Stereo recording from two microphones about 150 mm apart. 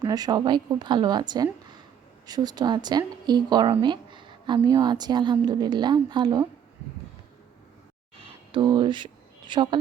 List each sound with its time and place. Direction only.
0.0 s speech: 25° right (ahead or behind)
8.5 s speech: 30° right (ahead or behind)